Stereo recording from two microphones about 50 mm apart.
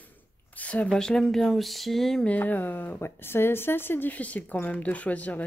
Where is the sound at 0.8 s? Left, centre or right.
Centre.